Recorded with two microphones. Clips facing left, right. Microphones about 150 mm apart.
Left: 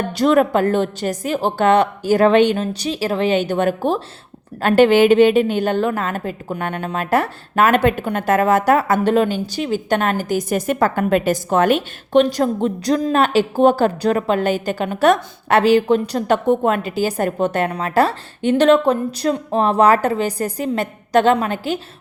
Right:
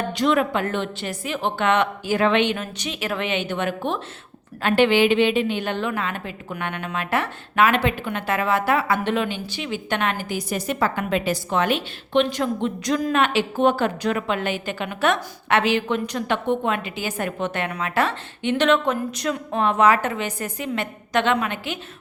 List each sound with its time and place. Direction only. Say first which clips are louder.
0.2 s a woman's voice: left 7 dB; 40° left (ahead or behind)